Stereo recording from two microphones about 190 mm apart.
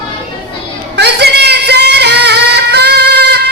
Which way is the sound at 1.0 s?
60° right (ahead or behind).